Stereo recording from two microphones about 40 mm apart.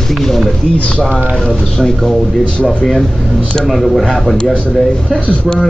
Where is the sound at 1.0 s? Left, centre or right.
Centre.